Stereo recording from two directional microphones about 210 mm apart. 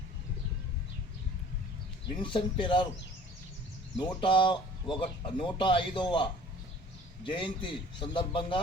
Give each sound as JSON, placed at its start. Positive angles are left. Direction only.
{"t": 2.2, "sound": "a man's voice", "side_deg": 25}
{"t": 3.9, "sound": "a man's voice", "side_deg": 20}